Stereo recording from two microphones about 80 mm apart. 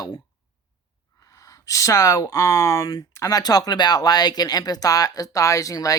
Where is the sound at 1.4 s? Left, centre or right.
Left.